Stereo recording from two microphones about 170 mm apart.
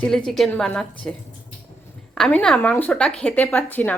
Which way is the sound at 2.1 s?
5° left (ahead or behind).